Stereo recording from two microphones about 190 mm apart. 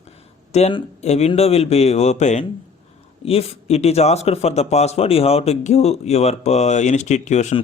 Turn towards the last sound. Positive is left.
turn(degrees=35)  # may be behind; listen again after turning